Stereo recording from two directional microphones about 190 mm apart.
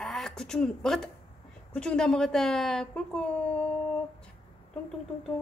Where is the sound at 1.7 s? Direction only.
5° left (ahead or behind).